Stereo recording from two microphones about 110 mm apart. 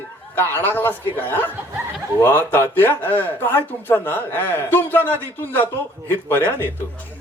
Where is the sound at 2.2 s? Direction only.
20° left (ahead or behind).